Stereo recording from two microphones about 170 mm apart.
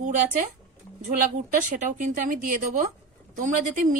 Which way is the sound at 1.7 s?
50° right (ahead or behind).